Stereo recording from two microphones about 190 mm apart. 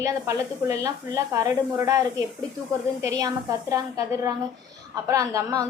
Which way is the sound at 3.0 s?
15° right (ahead or behind).